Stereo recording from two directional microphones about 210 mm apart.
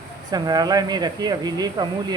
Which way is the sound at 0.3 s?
20° right (ahead or behind).